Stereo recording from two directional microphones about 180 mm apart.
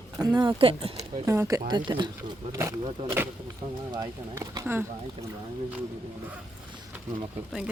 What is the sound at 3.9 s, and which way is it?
Speech, 20° right (ahead or behind).